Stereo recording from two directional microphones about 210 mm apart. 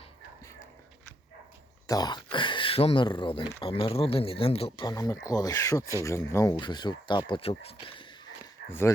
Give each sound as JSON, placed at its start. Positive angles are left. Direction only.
{"t": 1.9, "sound": "speech", "side_deg": 20}